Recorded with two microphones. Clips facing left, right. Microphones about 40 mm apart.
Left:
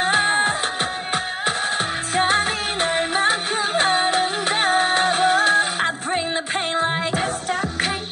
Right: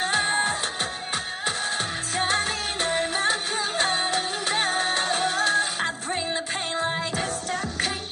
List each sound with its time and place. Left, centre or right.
0.0 s music: left
2.1 s music: left